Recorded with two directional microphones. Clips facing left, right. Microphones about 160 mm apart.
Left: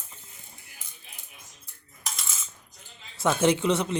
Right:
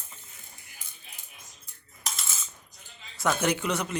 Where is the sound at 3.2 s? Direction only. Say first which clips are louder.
Left 4 dB; 25° left (ahead or behind).